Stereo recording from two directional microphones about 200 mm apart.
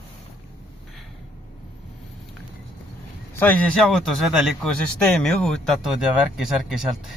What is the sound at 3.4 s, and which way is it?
A man's voice, centre (ahead or behind).